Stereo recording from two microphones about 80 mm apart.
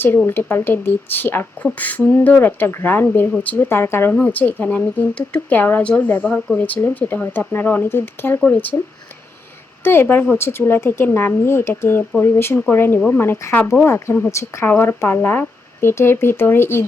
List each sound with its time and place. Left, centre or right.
0.3 s speech: left
9.8 s speech: left